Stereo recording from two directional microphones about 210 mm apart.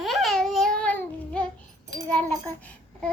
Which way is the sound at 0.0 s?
Centre (ahead or behind).